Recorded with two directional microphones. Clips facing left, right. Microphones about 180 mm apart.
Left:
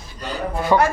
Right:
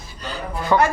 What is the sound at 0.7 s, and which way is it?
Speech, 10° left (ahead or behind).